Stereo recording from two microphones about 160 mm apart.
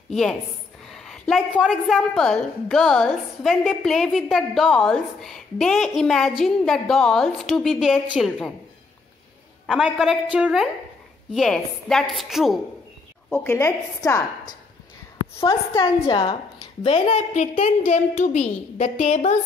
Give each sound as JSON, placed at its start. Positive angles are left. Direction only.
{"t": 0.1, "sound": "a woman's voice", "side_deg": 5}
{"t": 0.8, "sound": "a sound", "side_deg": 5}
{"t": 1.6, "sound": "a woman's voice", "side_deg": 0}
{"t": 9.7, "sound": "a woman's voice", "side_deg": -5}
{"t": 13.3, "sound": "a woman's voice", "side_deg": 10}
{"t": 15.8, "sound": "a woman's voice", "side_deg": 30}